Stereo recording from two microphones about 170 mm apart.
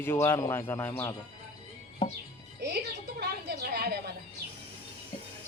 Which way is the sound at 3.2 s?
70° right (ahead or behind).